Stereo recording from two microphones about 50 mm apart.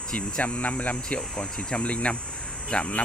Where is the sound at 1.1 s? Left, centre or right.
Centre.